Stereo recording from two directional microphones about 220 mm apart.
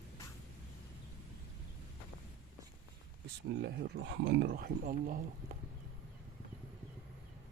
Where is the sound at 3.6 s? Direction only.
50° right (ahead or behind).